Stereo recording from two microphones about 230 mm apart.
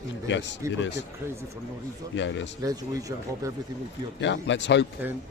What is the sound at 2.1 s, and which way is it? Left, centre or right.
Speech, left.